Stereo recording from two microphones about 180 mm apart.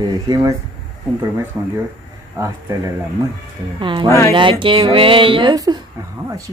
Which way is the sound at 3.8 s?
25° right (ahead or behind).